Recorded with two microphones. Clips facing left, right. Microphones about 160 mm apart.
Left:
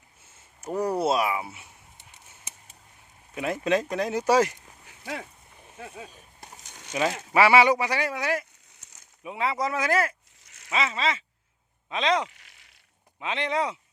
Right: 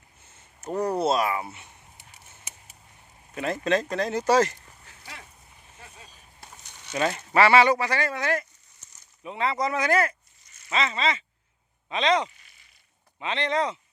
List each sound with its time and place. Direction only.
0.3 s speech: 5° left (ahead or behind)
3.3 s speech: 10° left (ahead or behind)
5.7 s speech: 60° left (ahead or behind)
6.9 s speech: 5° left (ahead or behind)
12.3 s a sound: 85° left
13.1 s speech: 5° left (ahead or behind)